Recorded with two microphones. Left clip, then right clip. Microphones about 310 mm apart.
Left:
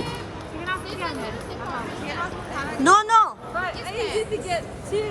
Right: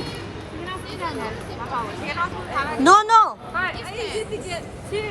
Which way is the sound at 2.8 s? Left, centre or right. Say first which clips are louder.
Right 2 dB; centre.